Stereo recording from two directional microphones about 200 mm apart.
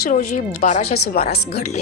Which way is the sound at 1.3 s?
55° left (ahead or behind).